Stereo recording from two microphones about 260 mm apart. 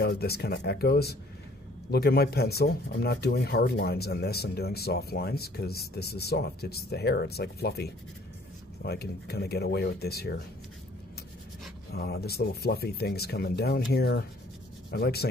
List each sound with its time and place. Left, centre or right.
0.0 s speech: left
11.9 s speech: left